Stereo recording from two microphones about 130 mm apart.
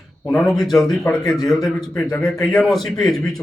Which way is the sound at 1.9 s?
25° left (ahead or behind).